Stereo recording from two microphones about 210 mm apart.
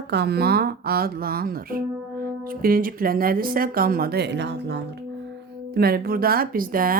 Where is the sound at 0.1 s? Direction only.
50° right (ahead or behind).